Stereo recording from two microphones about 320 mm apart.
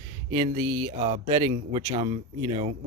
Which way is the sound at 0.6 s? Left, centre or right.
Right.